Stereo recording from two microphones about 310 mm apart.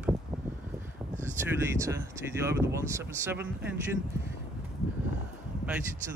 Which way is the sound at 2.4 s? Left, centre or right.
Centre.